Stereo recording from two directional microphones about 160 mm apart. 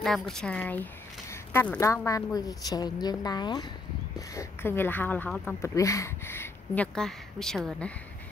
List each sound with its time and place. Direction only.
0.0 s a woman's voice: 5° left (ahead or behind)
5.3 s speech: centre (ahead or behind)
5.6 s speech: 20° left (ahead or behind); by 7.9 s centre (ahead or behind)